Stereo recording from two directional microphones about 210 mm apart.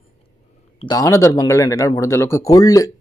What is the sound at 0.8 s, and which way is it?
A man's voice, 20° left (ahead or behind).